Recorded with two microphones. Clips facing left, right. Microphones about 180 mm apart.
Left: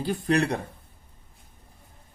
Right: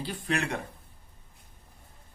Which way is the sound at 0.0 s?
45° left (ahead or behind).